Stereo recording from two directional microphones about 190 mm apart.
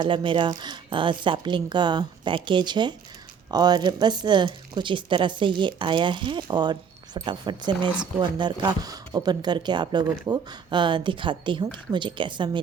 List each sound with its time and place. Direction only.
0.0 s speech: 25° right (ahead or behind)